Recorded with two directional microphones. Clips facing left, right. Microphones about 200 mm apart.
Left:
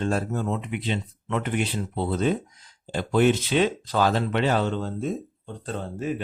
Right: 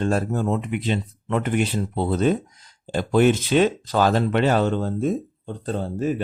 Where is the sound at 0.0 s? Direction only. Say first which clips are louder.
Right 4 dB; 45° right (ahead or behind).